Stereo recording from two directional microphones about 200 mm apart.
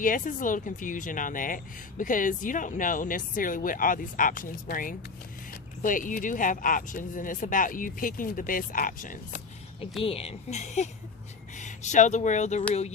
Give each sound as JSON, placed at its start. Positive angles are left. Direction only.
{"t": 0.0, "sound": "speech", "side_deg": 40}
{"t": 10.0, "sound": "speech", "side_deg": 30}